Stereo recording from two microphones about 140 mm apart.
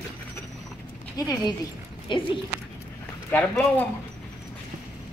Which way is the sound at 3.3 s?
10° left (ahead or behind).